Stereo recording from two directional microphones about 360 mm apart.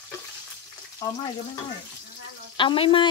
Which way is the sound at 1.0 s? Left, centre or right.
Centre.